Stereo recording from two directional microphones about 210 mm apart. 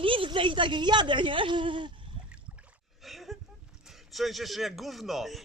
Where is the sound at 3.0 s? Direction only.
Centre (ahead or behind).